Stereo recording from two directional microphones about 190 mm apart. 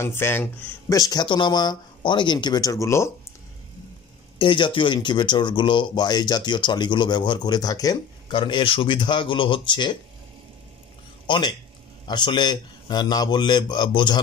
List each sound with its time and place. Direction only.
0.0 s speech: 10° left (ahead or behind)
4.4 s speech: 25° left (ahead or behind)
11.2 s speech: 25° left (ahead or behind)